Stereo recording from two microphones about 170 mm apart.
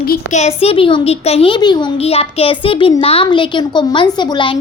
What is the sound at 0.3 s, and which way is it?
A child's voice, 40° left (ahead or behind).